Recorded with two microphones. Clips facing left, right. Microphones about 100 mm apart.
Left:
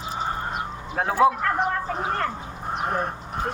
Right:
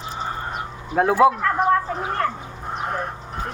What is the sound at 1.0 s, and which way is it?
Speech, 5° right (ahead or behind).